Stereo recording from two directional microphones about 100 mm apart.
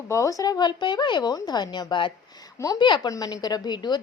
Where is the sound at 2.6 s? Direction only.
30° left (ahead or behind).